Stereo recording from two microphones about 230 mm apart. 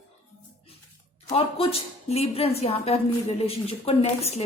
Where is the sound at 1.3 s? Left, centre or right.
Left.